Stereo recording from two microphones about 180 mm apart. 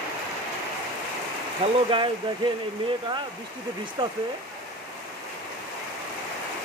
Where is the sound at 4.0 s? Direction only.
25° right (ahead or behind).